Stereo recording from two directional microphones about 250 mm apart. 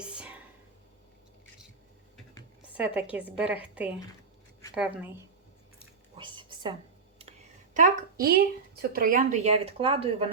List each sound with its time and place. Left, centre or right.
0.1 s whispering: centre
2.7 s a woman's voice: centre
6.1 s a sound: centre
7.2 s speech: right